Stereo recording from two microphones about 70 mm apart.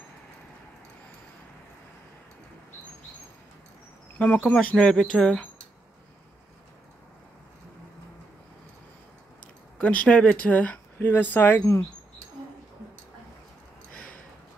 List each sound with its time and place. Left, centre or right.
4.2 s speech: left
9.8 s speech: centre
13.9 s a sound: centre